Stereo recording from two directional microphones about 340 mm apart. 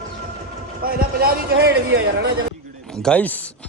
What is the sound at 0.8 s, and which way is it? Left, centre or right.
A man's voice, right.